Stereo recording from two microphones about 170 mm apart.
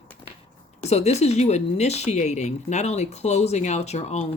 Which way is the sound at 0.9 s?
40° left (ahead or behind).